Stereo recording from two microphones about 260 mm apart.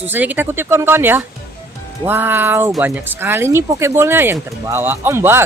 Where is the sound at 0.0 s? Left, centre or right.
Centre.